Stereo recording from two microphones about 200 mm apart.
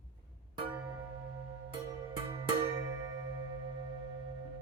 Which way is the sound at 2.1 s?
15° right (ahead or behind).